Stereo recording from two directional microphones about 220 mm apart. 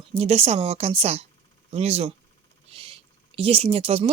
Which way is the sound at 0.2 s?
30° right (ahead or behind).